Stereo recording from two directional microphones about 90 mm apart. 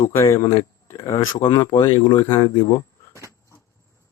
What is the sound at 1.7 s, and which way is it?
Speech, 55° left (ahead or behind).